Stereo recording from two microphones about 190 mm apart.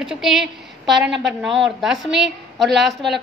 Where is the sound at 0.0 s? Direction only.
Centre (ahead or behind).